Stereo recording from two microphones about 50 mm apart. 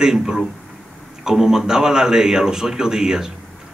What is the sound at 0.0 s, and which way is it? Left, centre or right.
Speech, centre.